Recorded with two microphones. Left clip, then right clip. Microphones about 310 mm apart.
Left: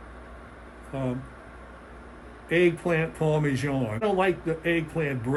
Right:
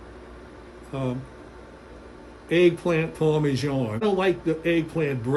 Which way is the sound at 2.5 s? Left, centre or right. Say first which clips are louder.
Right 3 dB; centre.